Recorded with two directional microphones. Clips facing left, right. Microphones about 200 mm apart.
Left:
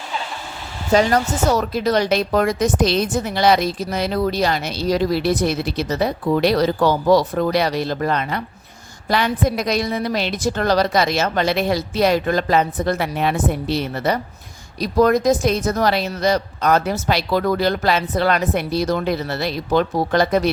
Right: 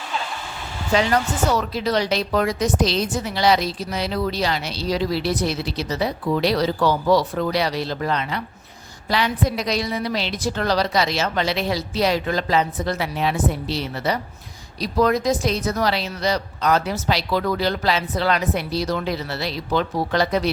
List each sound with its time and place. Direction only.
0.9 s speech: 45° left (ahead or behind)